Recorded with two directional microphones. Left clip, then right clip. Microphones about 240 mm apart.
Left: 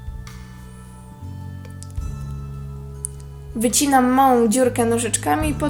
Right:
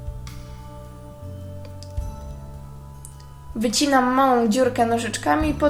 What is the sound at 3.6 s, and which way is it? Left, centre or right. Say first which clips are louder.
A woman's voice: left 2 dB; left.